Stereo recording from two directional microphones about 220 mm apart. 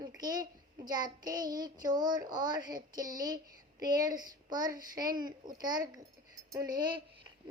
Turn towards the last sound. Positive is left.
turn(degrees=-20)  # may be behind; listen again after turning